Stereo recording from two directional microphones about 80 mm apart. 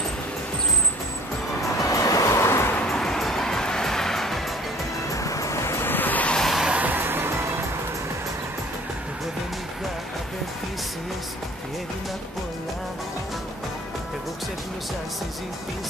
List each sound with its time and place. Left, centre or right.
1.8 s music: left
2.9 s music: centre
5.1 s vehicle: left
6.3 s a sound: centre
6.7 s music: right